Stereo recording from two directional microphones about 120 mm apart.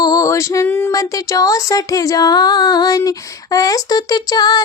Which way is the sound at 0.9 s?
30° left (ahead or behind).